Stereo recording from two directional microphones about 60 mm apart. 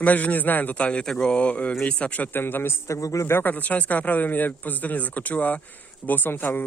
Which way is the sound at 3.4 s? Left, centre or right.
Left.